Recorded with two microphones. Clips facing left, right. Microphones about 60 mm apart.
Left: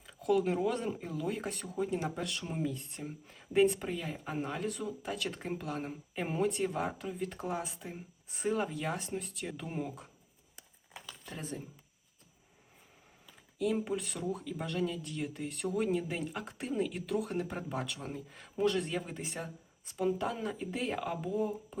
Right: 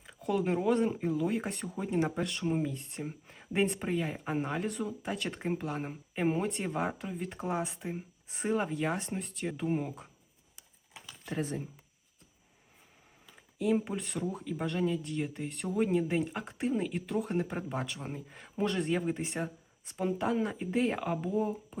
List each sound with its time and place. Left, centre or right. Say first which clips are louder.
0.0 s speech: left 2 dB; centre
9.0 s speech: right 2 dB; centre
10.9 s a sound: right 5 dB; centre
13.6 s speech: right 2 dB; centre
21.0 s speech: right 2 dB; centre